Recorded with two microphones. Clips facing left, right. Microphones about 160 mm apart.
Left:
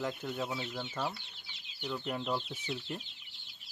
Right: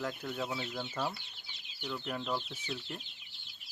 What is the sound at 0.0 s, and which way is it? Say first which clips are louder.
Speech: left 1 dB; centre (ahead or behind).